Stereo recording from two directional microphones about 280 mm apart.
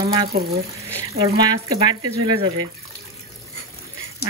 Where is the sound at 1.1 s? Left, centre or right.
Centre.